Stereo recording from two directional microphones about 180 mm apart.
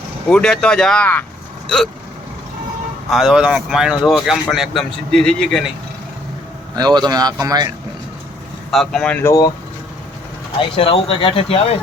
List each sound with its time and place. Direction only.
0.3 s speech: 5° left (ahead or behind)
3.1 s speech: centre (ahead or behind)
6.7 s speech: 20° right (ahead or behind)
8.7 s speech: centre (ahead or behind); by 9.5 s 15° left (ahead or behind)
10.6 s speech: 30° left (ahead or behind)